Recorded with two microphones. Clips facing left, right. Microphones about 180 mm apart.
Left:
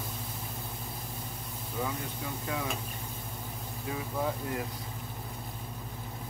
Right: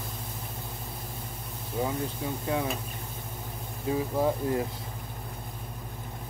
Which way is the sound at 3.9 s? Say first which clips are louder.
Right 7 dB; 30° right (ahead or behind).